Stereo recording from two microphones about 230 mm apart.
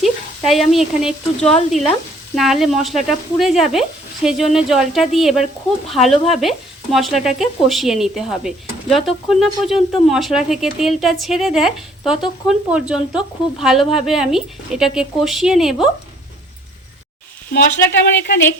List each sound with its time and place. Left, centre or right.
0.0 s speech: centre
18.2 s a woman's voice: left